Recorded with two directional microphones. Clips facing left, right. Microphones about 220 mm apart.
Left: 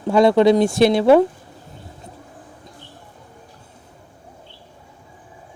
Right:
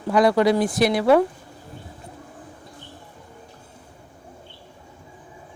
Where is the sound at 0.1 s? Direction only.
25° left (ahead or behind).